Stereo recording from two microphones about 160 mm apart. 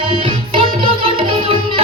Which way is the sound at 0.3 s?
35° right (ahead or behind).